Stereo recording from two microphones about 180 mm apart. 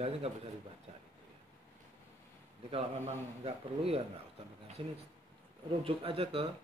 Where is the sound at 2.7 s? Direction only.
30° right (ahead or behind).